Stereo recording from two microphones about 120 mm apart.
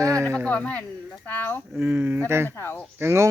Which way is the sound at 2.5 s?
15° left (ahead or behind).